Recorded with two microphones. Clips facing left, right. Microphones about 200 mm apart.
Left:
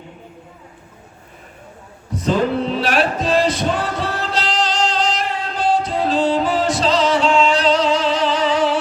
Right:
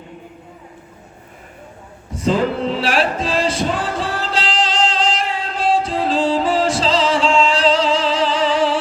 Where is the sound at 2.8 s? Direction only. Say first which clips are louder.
Even; 30° right (ahead or behind).